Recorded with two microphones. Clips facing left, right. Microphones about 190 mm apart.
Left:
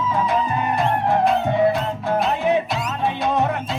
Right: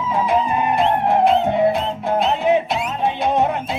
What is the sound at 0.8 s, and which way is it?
Music, 20° right (ahead or behind).